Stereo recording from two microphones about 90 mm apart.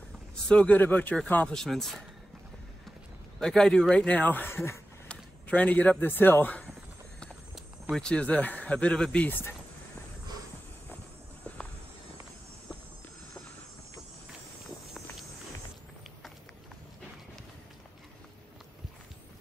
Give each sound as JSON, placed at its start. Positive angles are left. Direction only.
{"t": 0.5, "sound": "speech", "side_deg": 15}
{"t": 1.5, "sound": "speech", "side_deg": 5}
{"t": 3.3, "sound": "speech", "side_deg": 5}
{"t": 5.0, "sound": "a man's voice", "side_deg": 15}
{"t": 7.9, "sound": "speech", "side_deg": 10}